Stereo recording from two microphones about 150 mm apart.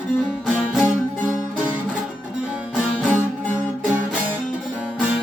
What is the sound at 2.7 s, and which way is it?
Music, 5° right (ahead or behind).